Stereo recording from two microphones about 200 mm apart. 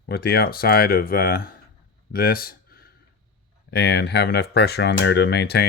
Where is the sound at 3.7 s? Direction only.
55° left (ahead or behind).